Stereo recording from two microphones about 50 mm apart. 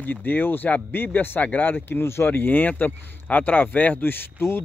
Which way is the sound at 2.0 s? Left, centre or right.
Left.